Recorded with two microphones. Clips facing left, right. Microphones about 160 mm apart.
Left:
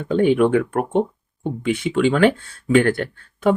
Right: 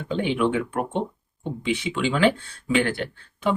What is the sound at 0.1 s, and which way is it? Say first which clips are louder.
Speech: left 7 dB; 45° left (ahead or behind).